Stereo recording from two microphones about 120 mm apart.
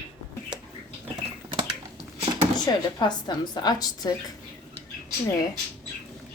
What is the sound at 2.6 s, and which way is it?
A woman's voice, 35° left (ahead or behind).